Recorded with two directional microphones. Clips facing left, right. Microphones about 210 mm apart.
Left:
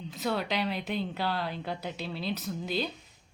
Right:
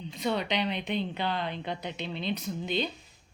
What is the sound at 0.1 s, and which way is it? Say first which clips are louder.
A woman's voice: right 1 dB; 5° left (ahead or behind).